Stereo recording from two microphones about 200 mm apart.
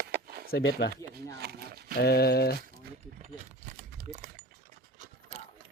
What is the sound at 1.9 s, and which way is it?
Speech, 50° left (ahead or behind).